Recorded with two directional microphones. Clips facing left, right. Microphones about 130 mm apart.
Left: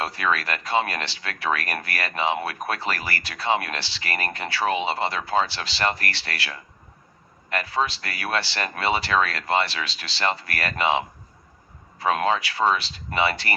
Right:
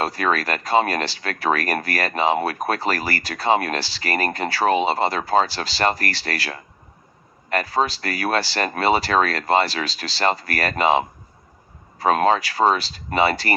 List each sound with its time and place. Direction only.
0.0 s speech: 40° right (ahead or behind)